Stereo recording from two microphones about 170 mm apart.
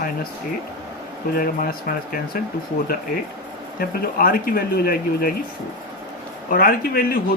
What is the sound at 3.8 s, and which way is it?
Speech, 60° left (ahead or behind).